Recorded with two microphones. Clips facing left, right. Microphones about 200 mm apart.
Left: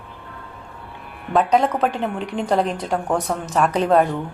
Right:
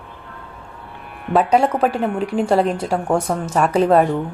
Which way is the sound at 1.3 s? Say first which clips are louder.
Right 2 dB; 5° right (ahead or behind).